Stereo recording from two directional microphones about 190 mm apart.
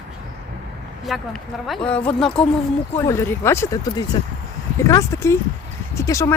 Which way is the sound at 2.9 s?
15° left (ahead or behind).